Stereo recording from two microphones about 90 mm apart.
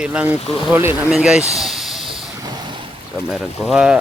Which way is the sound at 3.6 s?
5° right (ahead or behind).